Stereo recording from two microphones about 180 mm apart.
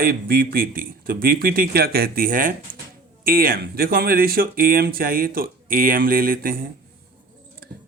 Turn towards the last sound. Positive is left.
turn(degrees=-55)  # may be behind; listen again after turning